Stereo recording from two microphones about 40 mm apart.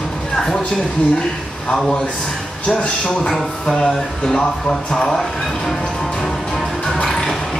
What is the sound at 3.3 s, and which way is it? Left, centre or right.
Speech, centre.